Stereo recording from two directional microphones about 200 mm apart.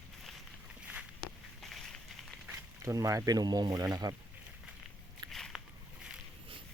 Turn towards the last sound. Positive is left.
turn(degrees=0)  # may be behind; listen again after turning